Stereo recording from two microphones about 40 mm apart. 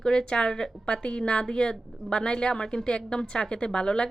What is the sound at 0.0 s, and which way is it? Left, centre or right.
A woman's voice, left.